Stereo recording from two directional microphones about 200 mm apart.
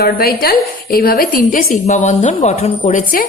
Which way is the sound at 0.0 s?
50° left (ahead or behind).